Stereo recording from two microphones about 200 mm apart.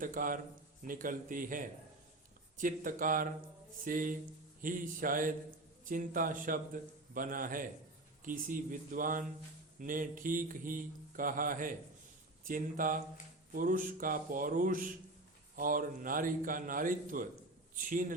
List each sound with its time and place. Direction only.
0.0 s a man's voice: 45° right (ahead or behind)